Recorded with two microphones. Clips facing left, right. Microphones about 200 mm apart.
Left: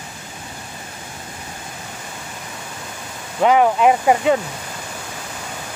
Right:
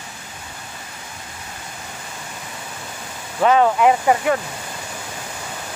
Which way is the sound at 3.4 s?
15° left (ahead or behind).